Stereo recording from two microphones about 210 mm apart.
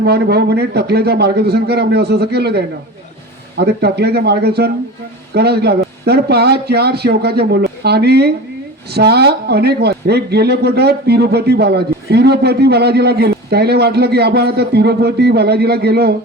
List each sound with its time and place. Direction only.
0.0 s speech: 50° right (ahead or behind)